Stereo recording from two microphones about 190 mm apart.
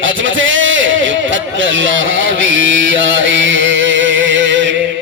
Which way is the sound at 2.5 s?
80° right.